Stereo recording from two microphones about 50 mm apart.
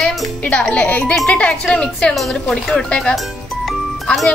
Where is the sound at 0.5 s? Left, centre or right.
Left.